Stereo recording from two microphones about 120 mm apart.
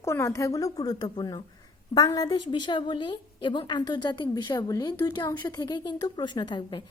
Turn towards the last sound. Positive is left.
turn(degrees=40)  # may be behind; listen again after turning